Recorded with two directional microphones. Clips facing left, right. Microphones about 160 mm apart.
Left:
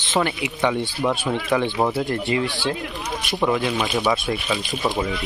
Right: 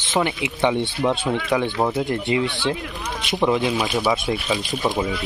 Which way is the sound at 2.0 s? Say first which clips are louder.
Right 1 dB; 20° right (ahead or behind).